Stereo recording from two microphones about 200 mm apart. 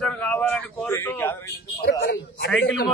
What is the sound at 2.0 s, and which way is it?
Speech, 55° left (ahead or behind).